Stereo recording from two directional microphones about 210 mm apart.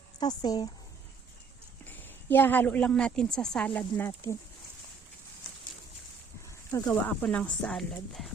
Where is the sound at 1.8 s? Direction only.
10° left (ahead or behind).